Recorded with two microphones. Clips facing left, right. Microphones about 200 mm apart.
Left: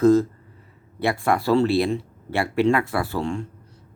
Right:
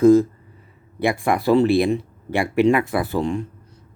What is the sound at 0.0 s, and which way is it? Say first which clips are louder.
Speech: right 3 dB; 10° right (ahead or behind).